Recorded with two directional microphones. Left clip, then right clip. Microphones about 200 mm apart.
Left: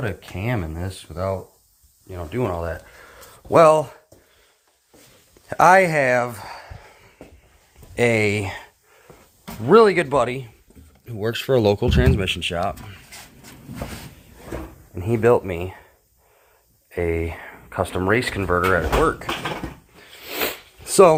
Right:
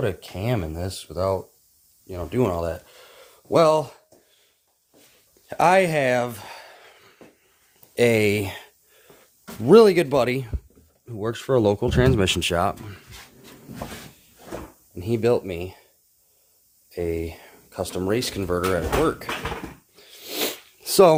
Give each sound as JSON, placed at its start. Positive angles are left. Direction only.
{"t": 0.0, "sound": "speech", "side_deg": -30}
{"t": 3.7, "sound": "speech", "side_deg": -15}
{"t": 5.5, "sound": "a sound", "side_deg": -15}
{"t": 9.6, "sound": "speech", "side_deg": -45}
{"t": 11.1, "sound": "speech", "side_deg": -15}
{"t": 11.9, "sound": "speech", "side_deg": -30}
{"t": 12.2, "sound": "speech", "side_deg": -45}
{"t": 14.9, "sound": "speech", "side_deg": -20}
{"t": 16.9, "sound": "a sound", "side_deg": -15}
{"t": 17.9, "sound": "speech", "side_deg": -20}
{"t": 20.0, "sound": "sniff", "side_deg": -35}